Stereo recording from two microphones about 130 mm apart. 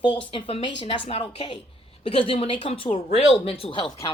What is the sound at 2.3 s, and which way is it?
Speech, 45° left (ahead or behind).